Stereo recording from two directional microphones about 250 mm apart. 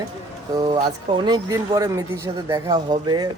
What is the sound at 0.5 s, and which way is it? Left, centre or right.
Speech, centre.